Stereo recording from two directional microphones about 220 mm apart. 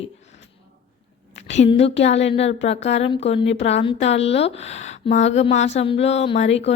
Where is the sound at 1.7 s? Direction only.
30° left (ahead or behind).